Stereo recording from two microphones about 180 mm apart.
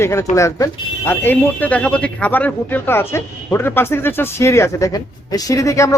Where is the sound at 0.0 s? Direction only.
15° left (ahead or behind).